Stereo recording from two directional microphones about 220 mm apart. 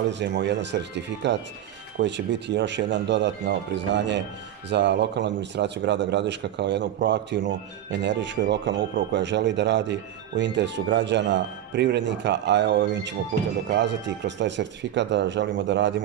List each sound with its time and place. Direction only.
0.1 s speech: 50° right (ahead or behind)